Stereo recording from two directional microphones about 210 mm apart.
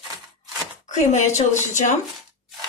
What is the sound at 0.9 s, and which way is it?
A woman's voice, 35° left (ahead or behind).